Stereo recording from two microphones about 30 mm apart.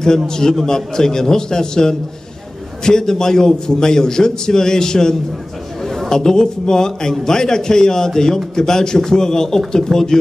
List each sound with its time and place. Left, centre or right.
0.3 s a man's voice: centre